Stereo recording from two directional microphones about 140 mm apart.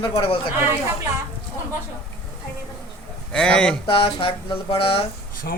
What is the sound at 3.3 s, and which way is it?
Speech, 5° left (ahead or behind).